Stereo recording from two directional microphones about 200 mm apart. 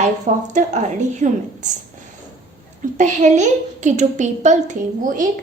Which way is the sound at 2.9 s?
35° right (ahead or behind).